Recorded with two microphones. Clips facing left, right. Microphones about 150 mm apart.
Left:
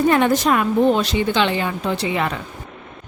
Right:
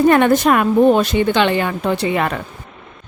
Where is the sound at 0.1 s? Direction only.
60° right (ahead or behind).